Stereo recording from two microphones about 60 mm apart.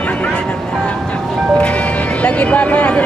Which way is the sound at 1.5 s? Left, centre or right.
Left.